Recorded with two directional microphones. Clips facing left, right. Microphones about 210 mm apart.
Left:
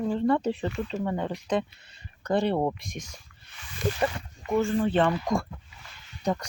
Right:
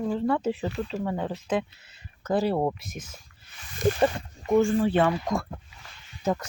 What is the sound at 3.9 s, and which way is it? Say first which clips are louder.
Speech: right 4 dB; 30° right (ahead or behind).